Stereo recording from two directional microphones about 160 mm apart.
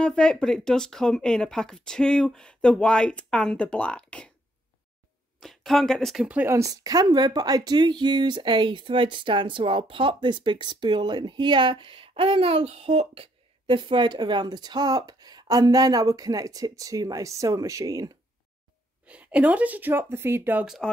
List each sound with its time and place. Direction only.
0.0 s speech: 5° left (ahead or behind)
5.4 s speech: centre (ahead or behind); by 18.1 s 20° right (ahead or behind)
19.0 s speech: 10° right (ahead or behind)